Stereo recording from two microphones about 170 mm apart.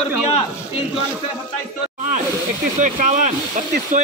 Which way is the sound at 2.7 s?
45° right (ahead or behind).